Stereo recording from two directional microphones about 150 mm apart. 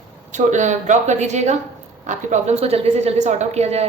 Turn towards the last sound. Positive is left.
turn(degrees=-45)  # may be behind; listen again after turning